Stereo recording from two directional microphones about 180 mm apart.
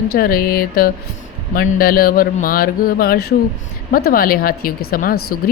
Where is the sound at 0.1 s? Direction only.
55° left (ahead or behind).